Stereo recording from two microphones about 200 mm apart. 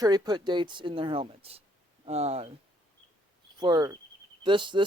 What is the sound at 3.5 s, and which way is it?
Speech, 20° right (ahead or behind).